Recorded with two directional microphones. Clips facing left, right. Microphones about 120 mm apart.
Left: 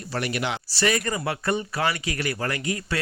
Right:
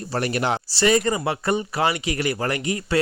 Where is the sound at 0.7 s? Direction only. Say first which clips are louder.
Right 5 dB; 30° right (ahead or behind).